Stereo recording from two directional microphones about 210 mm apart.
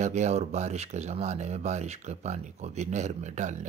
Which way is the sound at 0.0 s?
35° right (ahead or behind).